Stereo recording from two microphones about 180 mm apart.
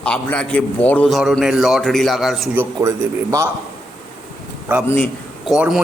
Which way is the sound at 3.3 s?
15° right (ahead or behind).